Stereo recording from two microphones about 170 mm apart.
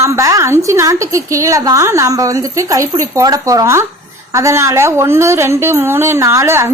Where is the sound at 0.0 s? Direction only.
20° right (ahead or behind).